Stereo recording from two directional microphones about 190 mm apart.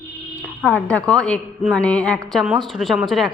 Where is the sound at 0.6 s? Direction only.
10° left (ahead or behind).